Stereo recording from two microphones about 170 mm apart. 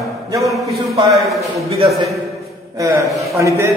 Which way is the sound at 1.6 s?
35° right (ahead or behind).